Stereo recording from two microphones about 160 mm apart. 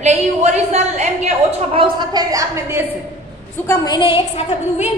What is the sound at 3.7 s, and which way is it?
A woman's voice, 20° left (ahead or behind).